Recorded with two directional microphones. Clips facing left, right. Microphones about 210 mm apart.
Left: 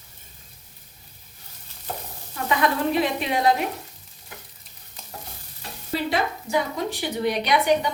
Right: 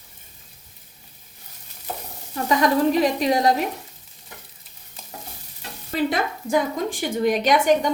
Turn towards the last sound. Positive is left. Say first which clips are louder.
# right 3 dB
turn(degrees=-45)  # may be behind; listen again after turning